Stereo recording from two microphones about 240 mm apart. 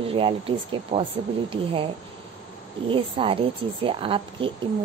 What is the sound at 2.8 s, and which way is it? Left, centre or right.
A woman's voice, right.